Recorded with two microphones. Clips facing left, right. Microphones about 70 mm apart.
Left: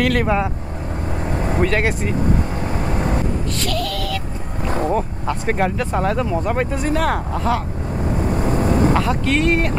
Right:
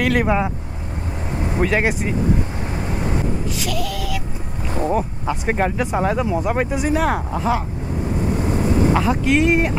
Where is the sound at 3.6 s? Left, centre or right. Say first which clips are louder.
Left 2 dB; centre.